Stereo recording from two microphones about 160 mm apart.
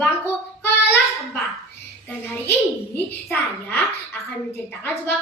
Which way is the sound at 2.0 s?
10° left (ahead or behind).